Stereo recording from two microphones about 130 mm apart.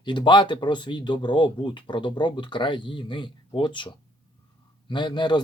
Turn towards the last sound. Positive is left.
turn(degrees=35)  # may be behind; listen again after turning